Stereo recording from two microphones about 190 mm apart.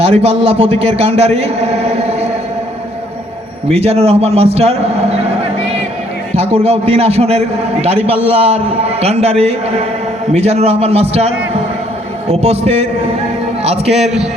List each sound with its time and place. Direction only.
0.0 s a man's voice: 30° right (ahead or behind)
3.7 s a man's voice: 35° right (ahead or behind)
6.3 s a man's voice: 35° right (ahead or behind)
12.3 s a man's voice: 35° right (ahead or behind)
13.9 s a man's voice: 5° right (ahead or behind)